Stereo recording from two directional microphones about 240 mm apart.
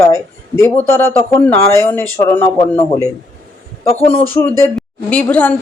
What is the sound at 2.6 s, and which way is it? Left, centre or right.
Speech, left.